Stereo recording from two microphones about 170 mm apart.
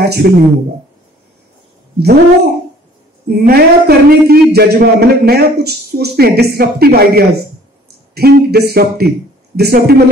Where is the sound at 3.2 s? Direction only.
70° right (ahead or behind).